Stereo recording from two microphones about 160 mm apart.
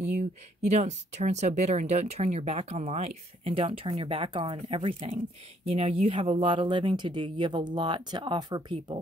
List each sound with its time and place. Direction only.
0.2 s speech: 45° right (ahead or behind); by 9.0 s 30° right (ahead or behind)